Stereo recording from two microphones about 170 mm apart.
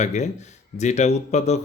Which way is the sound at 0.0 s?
45° left (ahead or behind).